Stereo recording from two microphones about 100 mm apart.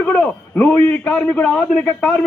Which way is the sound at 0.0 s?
15° left (ahead or behind).